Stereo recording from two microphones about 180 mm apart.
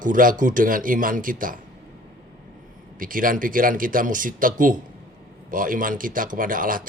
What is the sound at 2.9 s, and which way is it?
Speech, 50° right (ahead or behind).